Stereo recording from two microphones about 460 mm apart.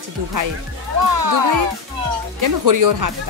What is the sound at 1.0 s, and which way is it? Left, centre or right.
Speech, right.